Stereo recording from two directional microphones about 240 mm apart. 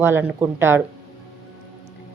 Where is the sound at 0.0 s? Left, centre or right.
Centre.